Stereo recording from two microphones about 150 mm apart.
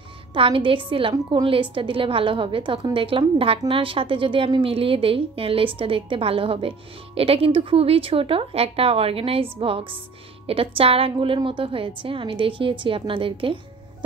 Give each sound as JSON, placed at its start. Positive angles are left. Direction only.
{"t": 0.3, "sound": "a woman's voice", "side_deg": -35}